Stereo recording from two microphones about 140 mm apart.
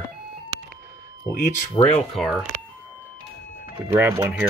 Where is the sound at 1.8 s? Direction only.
30° left (ahead or behind).